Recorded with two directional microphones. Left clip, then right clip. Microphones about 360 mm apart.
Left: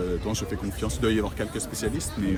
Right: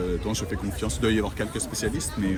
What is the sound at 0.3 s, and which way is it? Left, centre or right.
Speech, centre.